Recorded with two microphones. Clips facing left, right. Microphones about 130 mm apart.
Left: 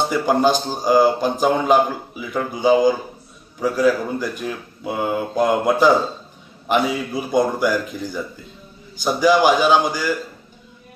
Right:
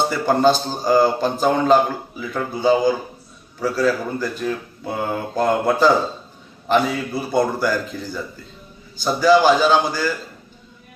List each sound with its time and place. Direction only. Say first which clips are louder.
0.3 s a man's voice: right 2 dB; 15° left (ahead or behind)